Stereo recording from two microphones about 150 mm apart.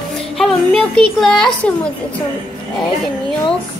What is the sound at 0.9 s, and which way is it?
Speech, 5° left (ahead or behind).